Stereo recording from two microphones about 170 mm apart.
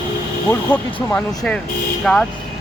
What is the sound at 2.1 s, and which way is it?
Speech, centre (ahead or behind).